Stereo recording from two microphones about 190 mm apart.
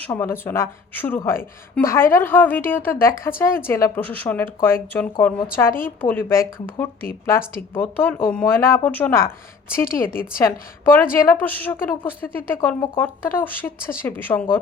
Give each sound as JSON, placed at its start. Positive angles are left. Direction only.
{"t": 0.0, "sound": "a woman's voice", "side_deg": 10}
{"t": 10.1, "sound": "a woman's voice", "side_deg": 50}
{"t": 10.4, "sound": "a woman's voice", "side_deg": 10}
{"t": 12.6, "sound": "a woman's voice", "side_deg": 20}